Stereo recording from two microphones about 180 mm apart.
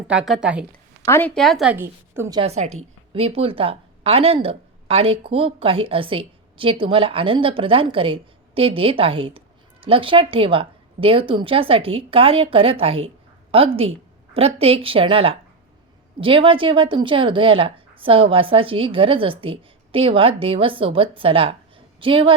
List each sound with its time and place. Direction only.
0.1 s a woman's voice: 5° right (ahead or behind)
0.7 s a sound: 10° left (ahead or behind)
1.3 s a woman's voice: centre (ahead or behind)
1.7 s a woman's voice: 10° right (ahead or behind)
2.4 s a woman's voice: 35° right (ahead or behind)